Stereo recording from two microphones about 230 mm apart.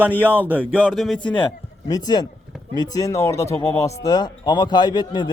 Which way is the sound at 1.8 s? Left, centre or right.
Centre.